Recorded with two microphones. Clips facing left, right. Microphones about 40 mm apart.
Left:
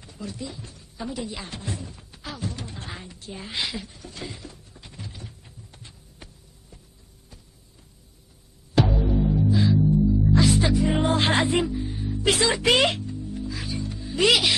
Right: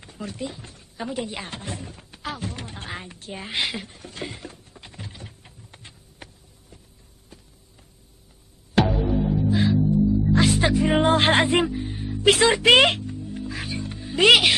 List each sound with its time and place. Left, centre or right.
0.0 s a sound: right
8.7 s music: right
9.2 s music: centre
9.5 s music: right
10.0 s music: centre
10.3 s music: right